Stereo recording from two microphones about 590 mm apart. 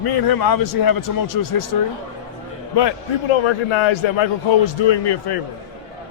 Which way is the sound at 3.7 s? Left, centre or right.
Left.